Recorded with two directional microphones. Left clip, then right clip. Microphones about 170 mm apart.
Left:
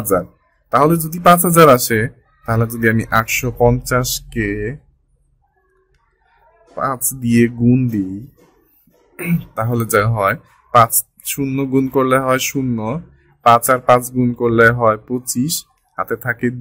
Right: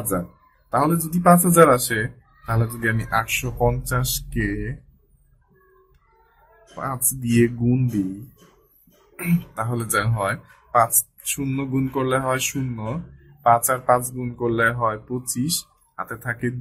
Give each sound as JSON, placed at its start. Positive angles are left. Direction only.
{"t": 0.1, "sound": "speech", "side_deg": 60}
{"t": 6.7, "sound": "speech", "side_deg": 55}
{"t": 9.1, "sound": "speech", "side_deg": 60}